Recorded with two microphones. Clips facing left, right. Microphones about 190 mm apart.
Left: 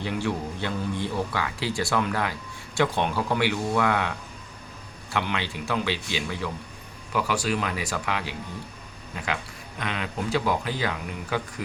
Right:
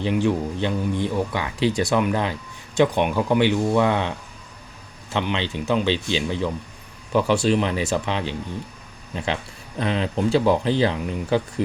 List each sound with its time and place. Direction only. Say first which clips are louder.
0.0 s speech: right 7 dB; 20° right (ahead or behind)
5.1 s speech: right 4 dB; 25° right (ahead or behind)